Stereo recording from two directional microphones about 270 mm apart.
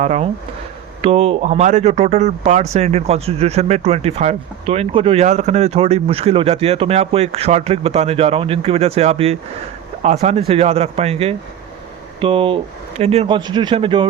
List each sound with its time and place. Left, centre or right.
0.0 s speech: right